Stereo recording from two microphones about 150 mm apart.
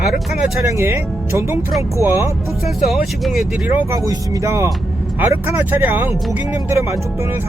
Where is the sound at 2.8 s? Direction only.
Centre (ahead or behind).